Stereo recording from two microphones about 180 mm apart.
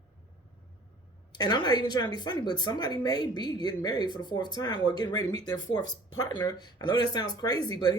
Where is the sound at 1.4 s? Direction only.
25° left (ahead or behind).